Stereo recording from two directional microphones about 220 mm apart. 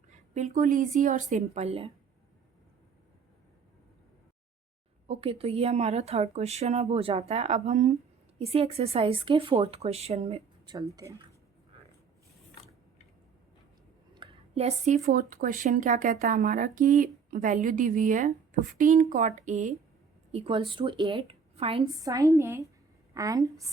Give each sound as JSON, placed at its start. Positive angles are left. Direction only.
{"t": 0.1, "sound": "speech", "side_deg": -35}
{"t": 5.0, "sound": "a woman's voice", "side_deg": -25}
{"t": 10.8, "sound": "a woman's voice", "side_deg": -15}
{"t": 14.1, "sound": "a woman's voice", "side_deg": -25}